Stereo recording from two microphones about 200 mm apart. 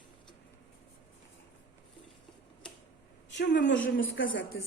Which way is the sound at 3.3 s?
60° left (ahead or behind).